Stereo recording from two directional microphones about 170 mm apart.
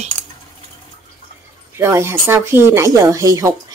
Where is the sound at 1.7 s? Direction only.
15° right (ahead or behind).